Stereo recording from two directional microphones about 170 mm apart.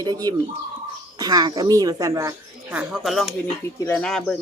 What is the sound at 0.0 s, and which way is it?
Speech, 25° right (ahead or behind).